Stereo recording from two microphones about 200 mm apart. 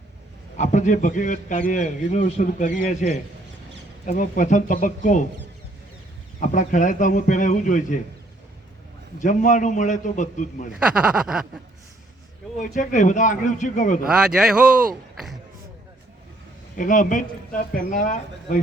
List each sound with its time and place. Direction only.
0.5 s a man's voice: 35° left (ahead or behind)
6.4 s a man's voice: 40° left (ahead or behind)
9.1 s a man's voice: 40° left (ahead or behind)
10.9 s a man's voice: 5° right (ahead or behind)
12.5 s a man's voice: 40° left (ahead or behind)
14.0 s a man's voice: 5° right (ahead or behind)
16.7 s a man's voice: 40° left (ahead or behind)